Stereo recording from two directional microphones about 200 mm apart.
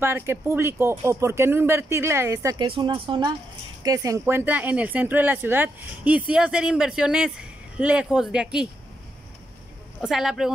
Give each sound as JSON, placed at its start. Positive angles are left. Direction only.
{"t": 0.0, "sound": "speech", "side_deg": -10}
{"t": 2.6, "sound": "speech", "side_deg": -25}
{"t": 10.0, "sound": "speech", "side_deg": 0}